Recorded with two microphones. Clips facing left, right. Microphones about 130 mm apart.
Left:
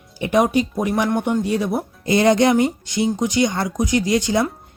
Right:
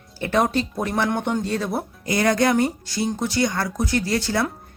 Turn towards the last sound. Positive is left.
turn(degrees=20)  # may be behind; listen again after turning